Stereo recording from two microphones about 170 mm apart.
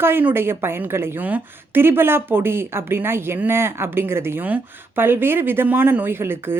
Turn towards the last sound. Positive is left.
turn(degrees=-15)  # may be behind; listen again after turning